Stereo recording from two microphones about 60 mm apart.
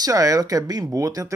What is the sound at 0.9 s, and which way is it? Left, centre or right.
Speech, right.